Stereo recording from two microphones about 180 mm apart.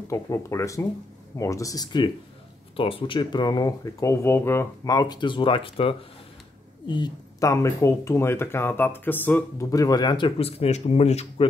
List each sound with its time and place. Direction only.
0.1 s speech: 15° left (ahead or behind); by 11.4 s 35° left (ahead or behind)